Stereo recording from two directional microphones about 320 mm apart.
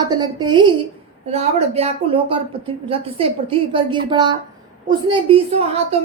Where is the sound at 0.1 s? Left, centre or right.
Centre.